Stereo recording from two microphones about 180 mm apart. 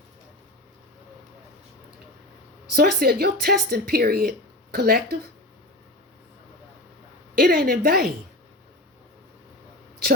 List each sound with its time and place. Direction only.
2.7 s speech: 60° right (ahead or behind)
7.3 s speech: 55° right (ahead or behind)